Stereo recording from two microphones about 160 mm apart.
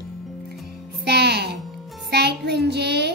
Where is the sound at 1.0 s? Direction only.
90° right.